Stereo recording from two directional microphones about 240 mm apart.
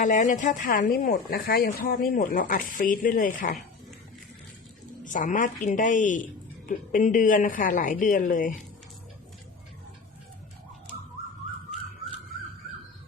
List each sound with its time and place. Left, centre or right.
0.0 s speech: left
5.0 s speech: left